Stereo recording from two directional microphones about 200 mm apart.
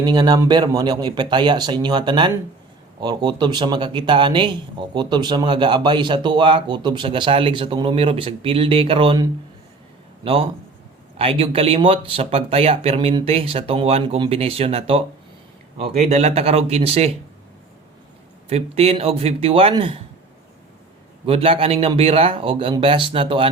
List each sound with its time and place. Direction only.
0.0 s a man's voice: 20° right (ahead or behind)
10.2 s a man's voice: 30° right (ahead or behind)
18.4 s a man's voice: 30° right (ahead or behind)
21.2 s a man's voice: 25° right (ahead or behind)